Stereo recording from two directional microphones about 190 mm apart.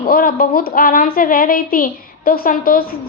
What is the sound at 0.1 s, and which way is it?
A woman's voice, 50° left (ahead or behind).